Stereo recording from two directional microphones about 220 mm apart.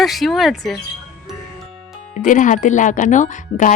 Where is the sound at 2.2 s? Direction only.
35° left (ahead or behind).